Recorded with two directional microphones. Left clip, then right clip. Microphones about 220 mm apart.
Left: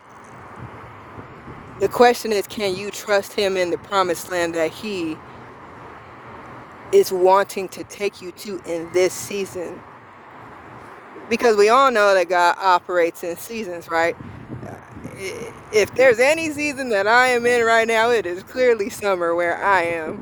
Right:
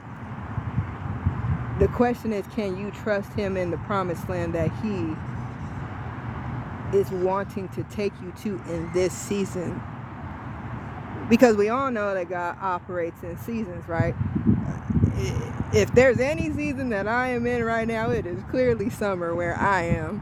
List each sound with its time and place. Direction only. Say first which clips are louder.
1.9 s speech: left 9 dB; 35° left (ahead or behind)
6.9 s speech: left 9 dB; 30° left (ahead or behind)
11.3 s speech: left 4 dB; 20° left (ahead or behind)
14.6 s speech: right 6 dB; 20° left (ahead or behind)